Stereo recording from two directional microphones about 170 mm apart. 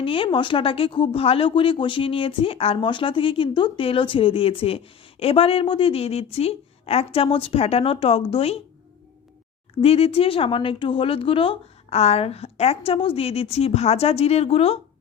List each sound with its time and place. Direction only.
0.0 s speech: 30° left (ahead or behind)
9.8 s speech: 35° left (ahead or behind)